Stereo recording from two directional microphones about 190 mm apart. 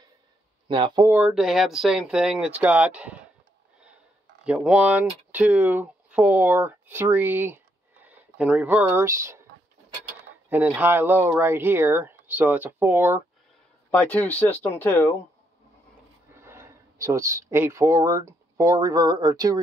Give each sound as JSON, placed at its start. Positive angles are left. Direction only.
{"t": 0.7, "sound": "speech", "side_deg": -25}
{"t": 1.0, "sound": "speech", "side_deg": -10}
{"t": 4.5, "sound": "speech", "side_deg": -5}
{"t": 10.5, "sound": "speech", "side_deg": -10}
{"t": 13.8, "sound": "speech", "side_deg": 10}
{"t": 16.3, "sound": "speech", "side_deg": -15}